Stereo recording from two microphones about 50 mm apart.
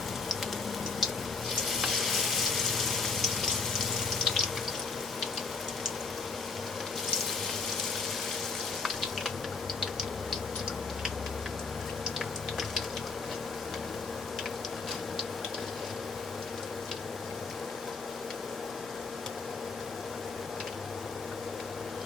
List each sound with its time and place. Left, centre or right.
0.9 s frying: centre
8.8 s frying: centre